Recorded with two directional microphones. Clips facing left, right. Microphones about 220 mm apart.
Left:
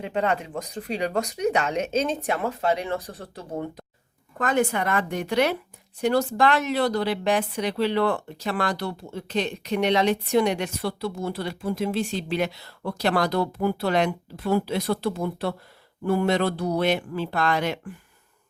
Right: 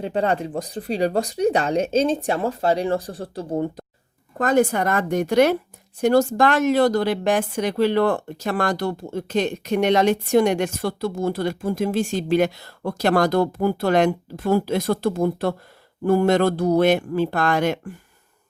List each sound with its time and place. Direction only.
0.0 s speech: 35° right (ahead or behind)